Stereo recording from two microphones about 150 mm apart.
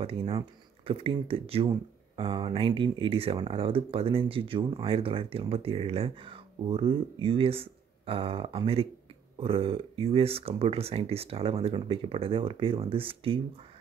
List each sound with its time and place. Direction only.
0.0 s speech: 40° right (ahead or behind)